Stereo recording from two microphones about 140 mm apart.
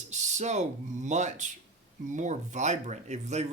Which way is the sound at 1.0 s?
55° right (ahead or behind).